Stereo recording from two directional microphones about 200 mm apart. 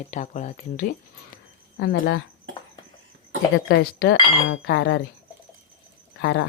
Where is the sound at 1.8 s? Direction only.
55° left (ahead or behind).